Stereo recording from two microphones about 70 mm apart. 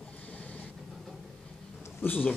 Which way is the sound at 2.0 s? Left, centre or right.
Left.